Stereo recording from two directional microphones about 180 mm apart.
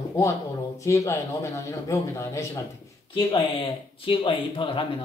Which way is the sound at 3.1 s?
30° left (ahead or behind).